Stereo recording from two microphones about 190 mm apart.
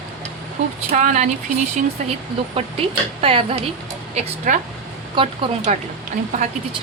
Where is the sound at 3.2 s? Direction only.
30° right (ahead or behind).